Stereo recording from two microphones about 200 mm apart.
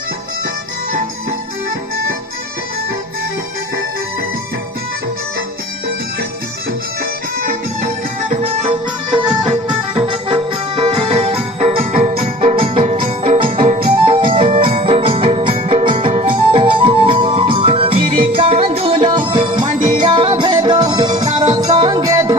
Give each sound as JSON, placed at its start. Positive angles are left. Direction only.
{"t": 8.3, "sound": "music", "side_deg": -35}